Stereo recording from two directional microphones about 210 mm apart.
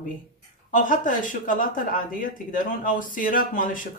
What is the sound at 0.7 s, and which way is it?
Speech, 40° left (ahead or behind).